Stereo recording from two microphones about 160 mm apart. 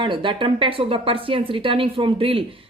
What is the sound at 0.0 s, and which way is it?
Speech, 30° right (ahead or behind).